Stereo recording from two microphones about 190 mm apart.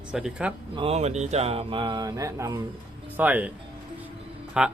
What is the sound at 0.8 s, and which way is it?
Speech, 35° right (ahead or behind).